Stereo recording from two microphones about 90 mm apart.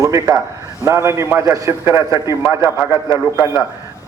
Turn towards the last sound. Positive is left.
turn(degrees=-35)  # may be behind; listen again after turning